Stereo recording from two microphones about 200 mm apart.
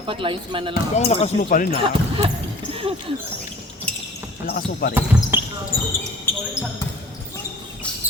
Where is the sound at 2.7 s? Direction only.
25° right (ahead or behind).